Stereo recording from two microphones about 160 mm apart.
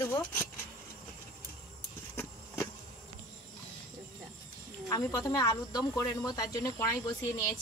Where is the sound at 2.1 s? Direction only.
15° left (ahead or behind).